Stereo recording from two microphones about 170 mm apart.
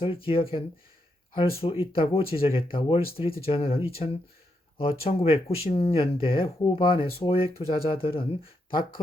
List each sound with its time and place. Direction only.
0.0 s speech: 30° left (ahead or behind)